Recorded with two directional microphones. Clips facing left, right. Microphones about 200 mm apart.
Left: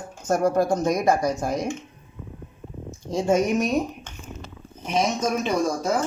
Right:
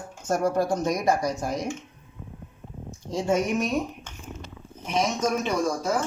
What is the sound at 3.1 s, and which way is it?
Speech, 45° left (ahead or behind).